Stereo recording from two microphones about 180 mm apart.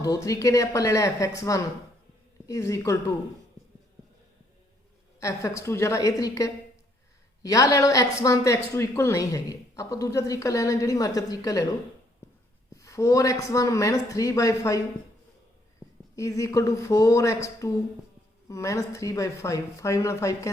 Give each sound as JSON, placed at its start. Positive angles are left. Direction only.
{"t": 0.0, "sound": "speech", "side_deg": 20}
{"t": 5.2, "sound": "speech", "side_deg": 15}
{"t": 12.7, "sound": "speech", "side_deg": 15}
{"t": 16.1, "sound": "speech", "side_deg": 15}